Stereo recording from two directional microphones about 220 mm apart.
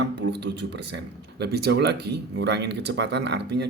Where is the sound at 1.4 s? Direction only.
50° right (ahead or behind).